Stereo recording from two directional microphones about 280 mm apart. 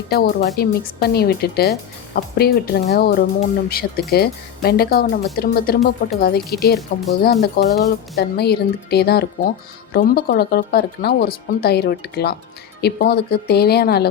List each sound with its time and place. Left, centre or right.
0.1 s speech: left